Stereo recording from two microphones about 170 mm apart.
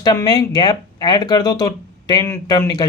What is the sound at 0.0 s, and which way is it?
Speech, 25° left (ahead or behind).